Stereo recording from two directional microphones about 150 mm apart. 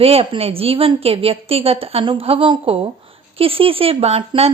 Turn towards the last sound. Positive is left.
turn(degrees=-40)  # may be behind; listen again after turning